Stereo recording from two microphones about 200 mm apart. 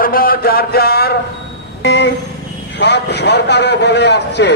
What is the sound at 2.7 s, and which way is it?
A man's voice, 60° left (ahead or behind).